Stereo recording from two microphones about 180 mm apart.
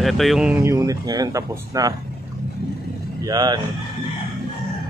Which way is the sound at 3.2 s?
20° right (ahead or behind).